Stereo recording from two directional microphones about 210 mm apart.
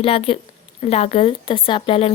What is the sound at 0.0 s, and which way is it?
Speech, 25° left (ahead or behind).